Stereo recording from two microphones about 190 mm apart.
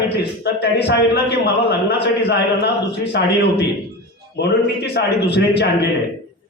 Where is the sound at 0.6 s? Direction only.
60° left (ahead or behind).